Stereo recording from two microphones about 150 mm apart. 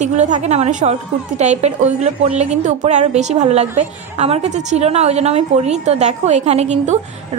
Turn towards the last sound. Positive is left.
turn(degrees=-50)  # may be behind; listen again after turning